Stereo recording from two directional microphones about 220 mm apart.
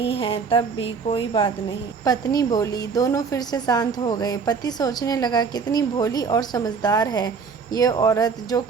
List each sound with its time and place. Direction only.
0.0 s a woman's voice: 25° left (ahead or behind)